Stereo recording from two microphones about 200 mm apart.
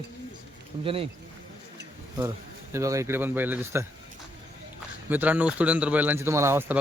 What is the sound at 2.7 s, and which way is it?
Speech, 15° right (ahead or behind).